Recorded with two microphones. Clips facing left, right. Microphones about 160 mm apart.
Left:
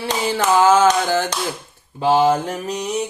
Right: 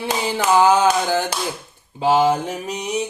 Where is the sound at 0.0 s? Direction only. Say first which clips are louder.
Left 1 dB; 15° right (ahead or behind).